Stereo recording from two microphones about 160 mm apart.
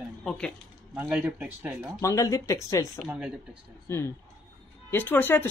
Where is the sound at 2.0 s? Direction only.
20° left (ahead or behind).